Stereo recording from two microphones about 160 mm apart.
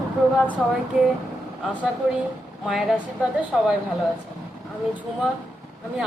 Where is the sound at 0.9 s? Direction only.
Centre (ahead or behind).